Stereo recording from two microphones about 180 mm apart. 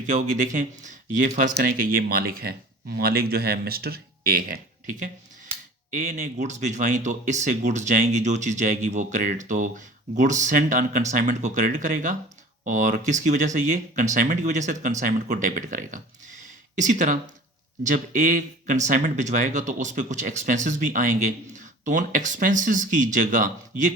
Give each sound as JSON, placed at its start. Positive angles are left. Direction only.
{"t": 0.1, "sound": "speech", "side_deg": -45}
{"t": 1.5, "sound": "speech", "side_deg": -55}
{"t": 5.9, "sound": "speech", "side_deg": -40}